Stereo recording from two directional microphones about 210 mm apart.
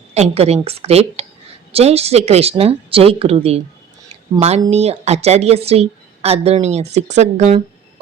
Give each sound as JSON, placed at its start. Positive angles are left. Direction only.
{"t": 0.1, "sound": "a woman's voice", "side_deg": -30}